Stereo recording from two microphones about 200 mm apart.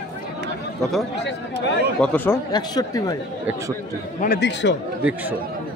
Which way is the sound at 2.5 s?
20° left (ahead or behind).